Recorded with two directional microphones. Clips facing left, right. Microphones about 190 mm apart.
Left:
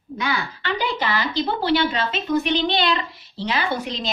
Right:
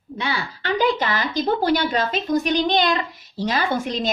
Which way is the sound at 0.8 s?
45° right (ahead or behind).